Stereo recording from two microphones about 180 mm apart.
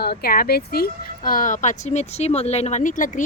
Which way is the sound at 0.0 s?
60° left (ahead or behind).